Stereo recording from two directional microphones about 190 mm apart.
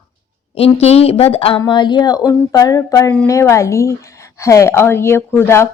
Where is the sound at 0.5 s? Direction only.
30° left (ahead or behind); by 5.6 s 15° left (ahead or behind).